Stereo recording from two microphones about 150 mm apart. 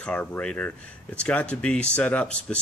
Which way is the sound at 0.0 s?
10° left (ahead or behind).